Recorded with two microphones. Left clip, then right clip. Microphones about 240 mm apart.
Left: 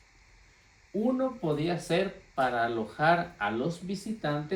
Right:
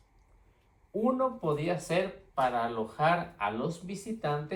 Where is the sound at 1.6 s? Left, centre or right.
Right.